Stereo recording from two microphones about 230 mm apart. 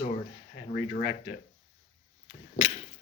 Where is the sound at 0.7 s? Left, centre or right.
Left.